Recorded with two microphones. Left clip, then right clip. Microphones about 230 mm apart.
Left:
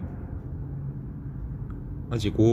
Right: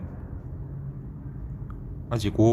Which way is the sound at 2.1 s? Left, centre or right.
Centre.